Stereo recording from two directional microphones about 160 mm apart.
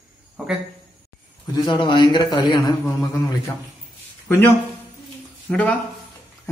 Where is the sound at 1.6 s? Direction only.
30° left (ahead or behind).